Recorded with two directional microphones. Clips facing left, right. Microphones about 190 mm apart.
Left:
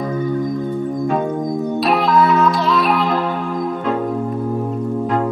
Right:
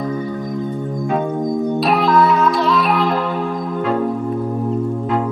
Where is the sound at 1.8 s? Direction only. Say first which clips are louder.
Even; centre (ahead or behind).